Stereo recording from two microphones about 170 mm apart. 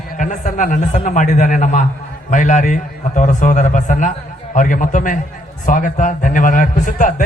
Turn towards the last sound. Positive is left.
turn(degrees=50)  # may be behind; listen again after turning